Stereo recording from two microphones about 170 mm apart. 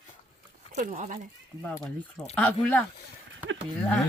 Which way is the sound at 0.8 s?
50° right (ahead or behind).